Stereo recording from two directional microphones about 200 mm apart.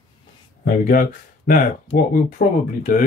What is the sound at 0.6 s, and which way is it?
Speech, 45° left (ahead or behind).